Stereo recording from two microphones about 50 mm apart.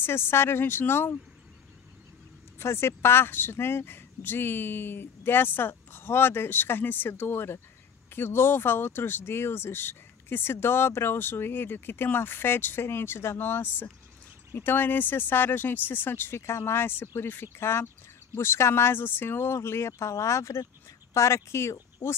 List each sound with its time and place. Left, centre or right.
0.0 s speech: left
2.6 s speech: left
17.2 s speech: left
17.6 s speech: left